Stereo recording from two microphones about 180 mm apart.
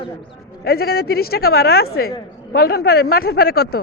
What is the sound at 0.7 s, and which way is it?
Speech, 60° left (ahead or behind).